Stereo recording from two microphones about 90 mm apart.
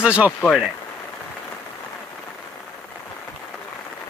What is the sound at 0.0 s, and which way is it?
Speech, 15° right (ahead or behind).